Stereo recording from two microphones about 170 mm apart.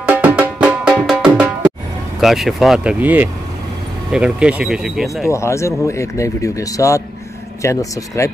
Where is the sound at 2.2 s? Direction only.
Centre (ahead or behind).